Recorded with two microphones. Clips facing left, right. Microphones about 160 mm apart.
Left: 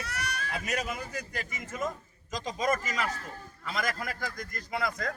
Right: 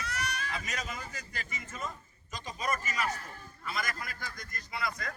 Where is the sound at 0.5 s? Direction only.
70° left (ahead or behind).